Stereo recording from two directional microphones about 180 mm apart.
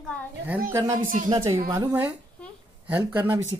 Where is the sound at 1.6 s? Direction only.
20° right (ahead or behind).